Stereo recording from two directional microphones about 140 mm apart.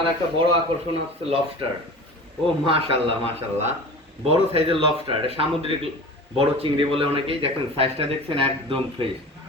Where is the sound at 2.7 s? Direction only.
40° right (ahead or behind).